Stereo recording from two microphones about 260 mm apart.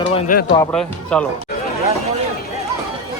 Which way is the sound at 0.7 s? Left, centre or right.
Centre.